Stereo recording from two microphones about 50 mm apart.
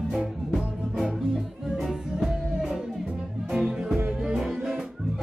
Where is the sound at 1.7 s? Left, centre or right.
Centre.